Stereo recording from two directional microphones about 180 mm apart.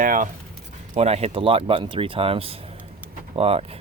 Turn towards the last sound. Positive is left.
turn(degrees=-35)  # may be behind; listen again after turning